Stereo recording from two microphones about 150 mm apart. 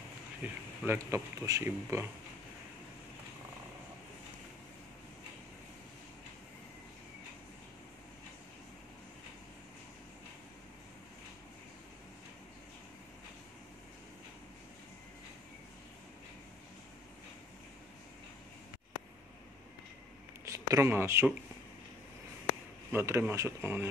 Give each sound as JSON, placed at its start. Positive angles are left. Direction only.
{"t": 0.4, "sound": "speech", "side_deg": -15}
{"t": 20.4, "sound": "a sound", "side_deg": -20}
{"t": 22.8, "sound": "speech", "side_deg": -15}